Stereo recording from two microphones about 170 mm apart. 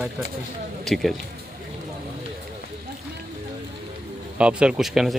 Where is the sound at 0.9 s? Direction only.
Centre (ahead or behind).